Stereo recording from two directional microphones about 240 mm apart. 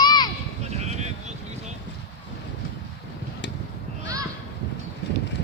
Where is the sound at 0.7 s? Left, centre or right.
Right.